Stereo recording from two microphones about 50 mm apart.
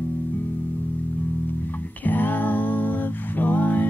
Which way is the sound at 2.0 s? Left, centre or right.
Left.